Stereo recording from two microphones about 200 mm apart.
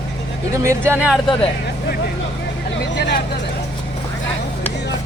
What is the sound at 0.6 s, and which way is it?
Speech, 10° right (ahead or behind).